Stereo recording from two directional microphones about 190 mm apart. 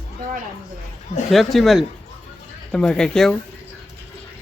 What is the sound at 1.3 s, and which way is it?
Speech, centre (ahead or behind).